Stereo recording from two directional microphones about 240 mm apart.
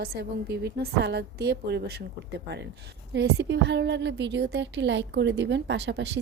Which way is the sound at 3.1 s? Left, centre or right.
Right.